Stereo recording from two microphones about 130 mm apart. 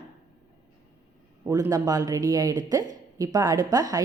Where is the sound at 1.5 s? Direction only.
25° right (ahead or behind).